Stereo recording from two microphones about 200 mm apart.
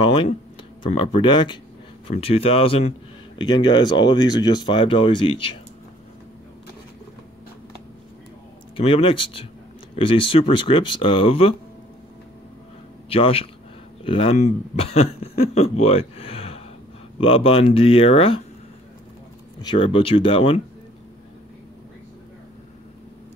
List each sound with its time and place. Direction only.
0.0 s a sound: 25° left (ahead or behind)
0.8 s speech: 25° left (ahead or behind)
8.7 s speech: 25° left (ahead or behind)
13.1 s speech: 30° left (ahead or behind)
19.6 s speech: 25° left (ahead or behind)